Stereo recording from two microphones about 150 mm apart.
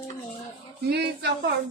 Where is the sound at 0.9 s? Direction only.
90° right.